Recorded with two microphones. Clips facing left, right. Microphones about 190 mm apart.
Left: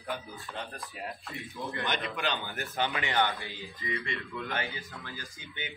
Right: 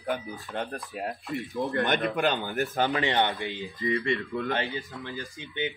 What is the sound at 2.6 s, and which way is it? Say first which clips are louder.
Speech: right 6 dB; 40° right (ahead or behind).